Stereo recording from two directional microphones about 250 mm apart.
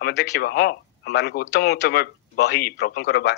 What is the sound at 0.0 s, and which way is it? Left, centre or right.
A man's voice, left.